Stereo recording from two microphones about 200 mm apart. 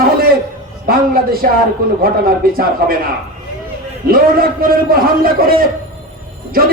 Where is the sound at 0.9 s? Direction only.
45° right (ahead or behind).